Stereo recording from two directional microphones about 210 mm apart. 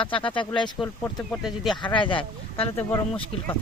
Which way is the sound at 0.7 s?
5° left (ahead or behind).